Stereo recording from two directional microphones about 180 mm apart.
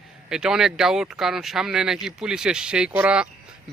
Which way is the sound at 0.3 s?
5° right (ahead or behind).